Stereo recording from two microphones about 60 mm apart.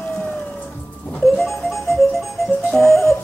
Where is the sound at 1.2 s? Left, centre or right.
Centre.